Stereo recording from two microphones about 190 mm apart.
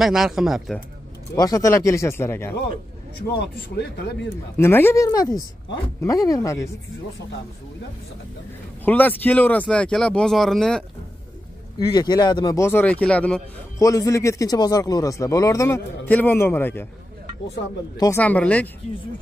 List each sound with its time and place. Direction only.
0.0 s speech: centre (ahead or behind)
1.3 s speech: 20° left (ahead or behind)
3.3 s speech: 60° left (ahead or behind)
4.6 s speech: 10° left (ahead or behind)
8.8 s speech: 10° left (ahead or behind)
11.9 s speech: 20° left (ahead or behind); by 13.4 s 5° left (ahead or behind)
13.7 s speech: 15° left (ahead or behind)
17.9 s speech: 20° left (ahead or behind)
18.2 s speech: 5° left (ahead or behind)